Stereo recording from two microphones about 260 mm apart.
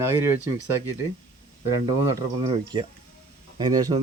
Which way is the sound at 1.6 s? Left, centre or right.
Centre.